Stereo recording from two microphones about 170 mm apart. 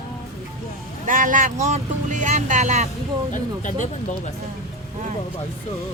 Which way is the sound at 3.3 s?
45° left (ahead or behind).